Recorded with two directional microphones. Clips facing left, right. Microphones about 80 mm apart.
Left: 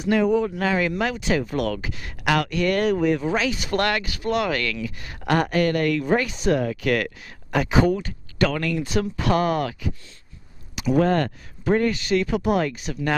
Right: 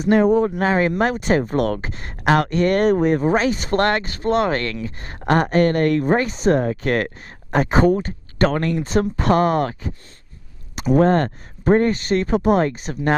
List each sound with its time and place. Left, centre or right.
0.0 s speech: right